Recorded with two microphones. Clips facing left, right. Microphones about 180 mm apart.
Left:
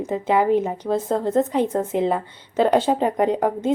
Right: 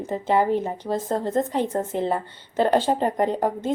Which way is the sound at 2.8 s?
10° left (ahead or behind).